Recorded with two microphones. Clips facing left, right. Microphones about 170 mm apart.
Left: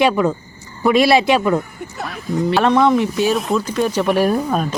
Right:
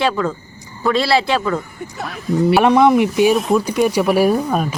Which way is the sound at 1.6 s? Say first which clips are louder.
Left 1 dB; centre (ahead or behind).